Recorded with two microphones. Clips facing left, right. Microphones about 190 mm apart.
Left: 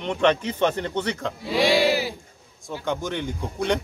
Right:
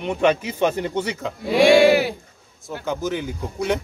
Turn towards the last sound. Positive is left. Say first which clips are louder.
# right 1 dB
turn(degrees=-5)  # may be behind; listen again after turning